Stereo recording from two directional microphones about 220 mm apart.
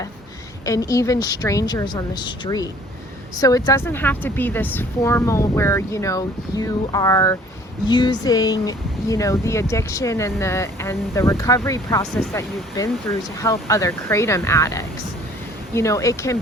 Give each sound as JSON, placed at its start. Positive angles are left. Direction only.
{"t": 0.6, "sound": "speech", "side_deg": 15}